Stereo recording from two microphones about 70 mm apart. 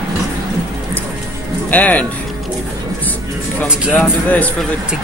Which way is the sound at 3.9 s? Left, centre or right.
Left.